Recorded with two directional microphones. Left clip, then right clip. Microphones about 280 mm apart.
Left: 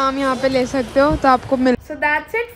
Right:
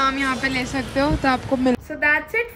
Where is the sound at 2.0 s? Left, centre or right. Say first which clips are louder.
Even; centre.